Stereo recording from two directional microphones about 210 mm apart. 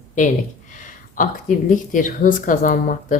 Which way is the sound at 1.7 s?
40° left (ahead or behind).